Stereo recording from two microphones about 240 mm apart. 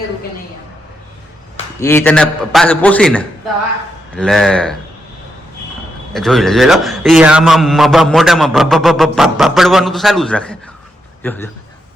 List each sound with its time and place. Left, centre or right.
1.8 s a man's voice: centre
6.1 s a man's voice: centre